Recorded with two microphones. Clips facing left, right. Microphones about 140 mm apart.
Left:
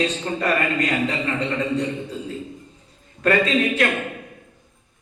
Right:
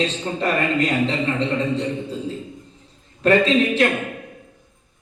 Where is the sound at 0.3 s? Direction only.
25° right (ahead or behind).